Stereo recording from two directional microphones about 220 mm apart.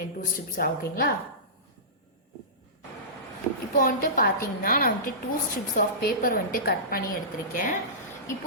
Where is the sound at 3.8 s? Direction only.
40° left (ahead or behind).